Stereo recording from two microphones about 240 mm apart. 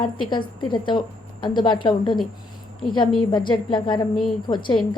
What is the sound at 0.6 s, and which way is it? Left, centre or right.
A woman's voice, centre.